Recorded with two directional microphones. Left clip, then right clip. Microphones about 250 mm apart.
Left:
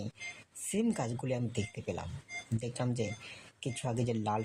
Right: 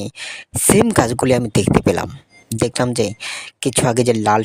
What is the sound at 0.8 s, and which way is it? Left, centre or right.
Speech, right.